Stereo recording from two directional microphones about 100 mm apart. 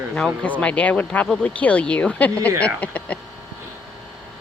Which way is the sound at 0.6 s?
15° left (ahead or behind).